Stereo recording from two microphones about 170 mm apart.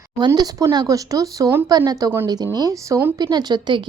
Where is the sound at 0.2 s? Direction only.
25° right (ahead or behind).